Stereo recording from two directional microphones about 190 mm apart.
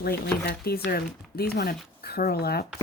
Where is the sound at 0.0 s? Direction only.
55° left (ahead or behind).